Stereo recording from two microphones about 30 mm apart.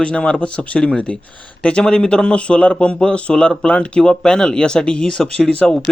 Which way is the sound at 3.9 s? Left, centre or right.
Left.